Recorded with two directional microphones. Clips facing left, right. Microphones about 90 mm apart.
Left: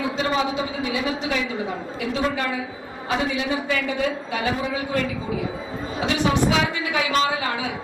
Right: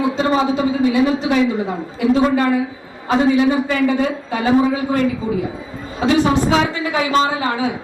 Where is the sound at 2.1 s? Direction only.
35° right (ahead or behind).